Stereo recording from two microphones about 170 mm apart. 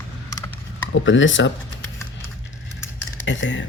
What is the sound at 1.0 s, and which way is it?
Speech, 90° left.